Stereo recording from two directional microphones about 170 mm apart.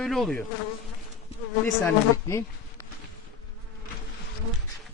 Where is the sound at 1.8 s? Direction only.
15° left (ahead or behind).